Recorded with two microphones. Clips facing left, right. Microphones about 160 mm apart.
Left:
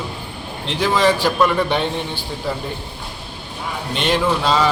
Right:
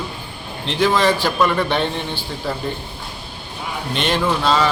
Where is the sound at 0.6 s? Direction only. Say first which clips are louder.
Even; 5° left (ahead or behind).